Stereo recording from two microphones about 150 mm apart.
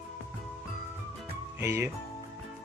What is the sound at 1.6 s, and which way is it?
Speech, 15° right (ahead or behind).